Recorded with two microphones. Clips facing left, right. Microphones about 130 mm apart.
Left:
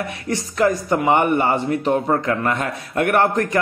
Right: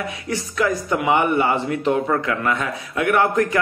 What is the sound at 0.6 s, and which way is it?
A man's voice, 45° left (ahead or behind).